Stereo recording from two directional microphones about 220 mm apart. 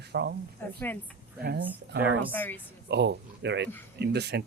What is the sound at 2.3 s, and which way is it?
Speech, 10° left (ahead or behind).